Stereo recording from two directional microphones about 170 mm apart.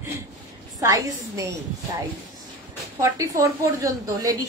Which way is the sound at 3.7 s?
20° right (ahead or behind).